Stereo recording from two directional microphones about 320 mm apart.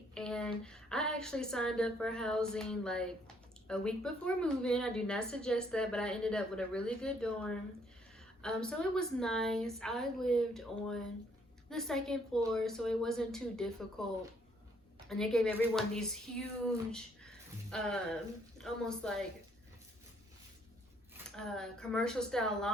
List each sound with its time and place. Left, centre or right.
0.1 s a woman's voice: centre
21.2 s a woman's voice: centre